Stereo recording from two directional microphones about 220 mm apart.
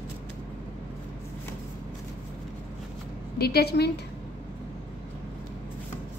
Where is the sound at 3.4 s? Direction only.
45° left (ahead or behind).